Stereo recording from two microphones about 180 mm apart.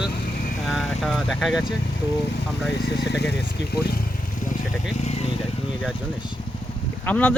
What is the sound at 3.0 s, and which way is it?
Speech, 70° left (ahead or behind).